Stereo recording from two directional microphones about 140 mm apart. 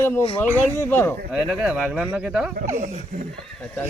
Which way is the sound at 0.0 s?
15° left (ahead or behind).